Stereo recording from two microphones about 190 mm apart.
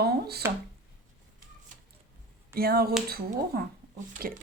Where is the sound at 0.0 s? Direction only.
55° right (ahead or behind).